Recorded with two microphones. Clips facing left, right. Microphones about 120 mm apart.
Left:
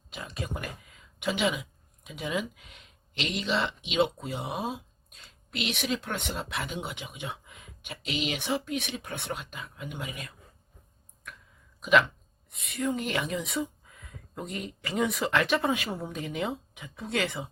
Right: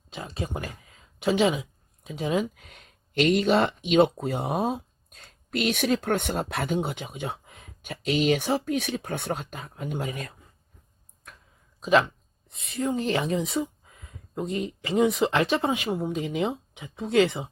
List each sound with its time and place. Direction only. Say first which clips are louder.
0.1 s speech: right 4 dB; 30° right (ahead or behind)
11.8 s speech: right 2 dB; 30° right (ahead or behind)